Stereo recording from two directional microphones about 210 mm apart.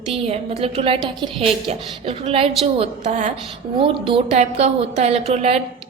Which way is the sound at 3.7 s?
25° right (ahead or behind).